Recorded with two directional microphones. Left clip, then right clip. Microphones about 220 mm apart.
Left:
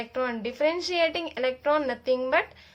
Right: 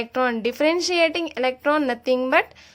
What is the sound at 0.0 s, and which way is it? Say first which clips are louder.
Speech: right 7 dB; 40° right (ahead or behind).